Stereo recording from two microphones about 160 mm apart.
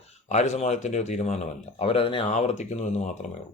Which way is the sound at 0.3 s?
45° left (ahead or behind).